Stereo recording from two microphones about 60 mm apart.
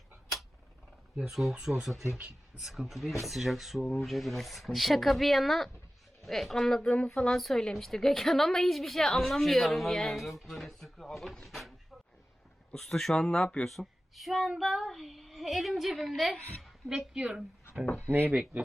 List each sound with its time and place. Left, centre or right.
1.1 s a woman's voice: centre
2.1 s speech: centre
2.6 s a woman's voice: centre
6.9 s speech: left
7.3 s a woman's voice: centre
12.7 s speech: centre
13.7 s a woman's voice: centre
17.2 s a woman's voice: centre
17.8 s speech: left
18.1 s speech: right